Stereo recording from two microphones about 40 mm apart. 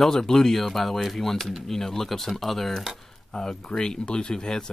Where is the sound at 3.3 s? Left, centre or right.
Centre.